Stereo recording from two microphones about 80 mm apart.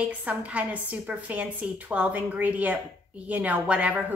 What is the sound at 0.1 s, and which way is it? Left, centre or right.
A woman's voice, centre.